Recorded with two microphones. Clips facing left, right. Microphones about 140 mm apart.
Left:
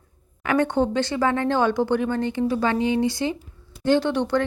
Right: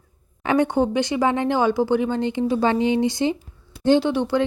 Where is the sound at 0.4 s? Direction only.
15° right (ahead or behind).